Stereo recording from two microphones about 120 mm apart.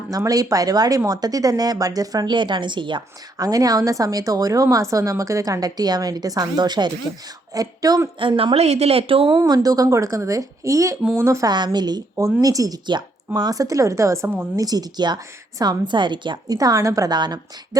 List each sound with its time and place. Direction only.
0.1 s speech: 30° right (ahead or behind)
3.3 s speech: 30° right (ahead or behind)
8.2 s speech: 45° right (ahead or behind)
8.5 s speech: 60° right (ahead or behind)
9.4 s a woman's voice: 30° right (ahead or behind)
11.5 s speech: 35° right (ahead or behind)